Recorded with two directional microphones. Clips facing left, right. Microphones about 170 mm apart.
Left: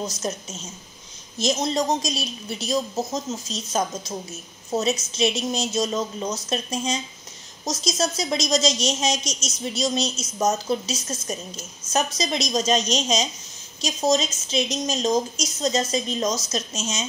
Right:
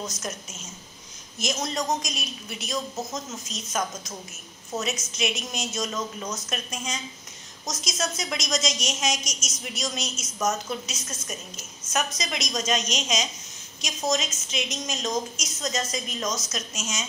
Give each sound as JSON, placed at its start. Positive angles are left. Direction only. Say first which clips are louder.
{"t": 0.0, "sound": "a woman's voice", "louder": "left 5 dB", "side_deg": 30}